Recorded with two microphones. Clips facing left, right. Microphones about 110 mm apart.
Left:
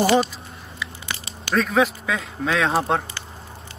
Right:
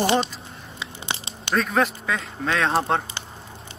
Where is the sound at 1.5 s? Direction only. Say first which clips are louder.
Left 2 dB; centre (ahead or behind).